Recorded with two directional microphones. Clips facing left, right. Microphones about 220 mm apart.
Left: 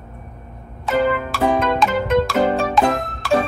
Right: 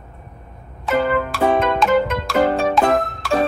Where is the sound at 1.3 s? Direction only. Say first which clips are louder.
Right 1 dB; centre (ahead or behind).